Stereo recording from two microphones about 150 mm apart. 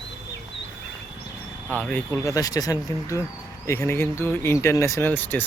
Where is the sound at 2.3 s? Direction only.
25° left (ahead or behind).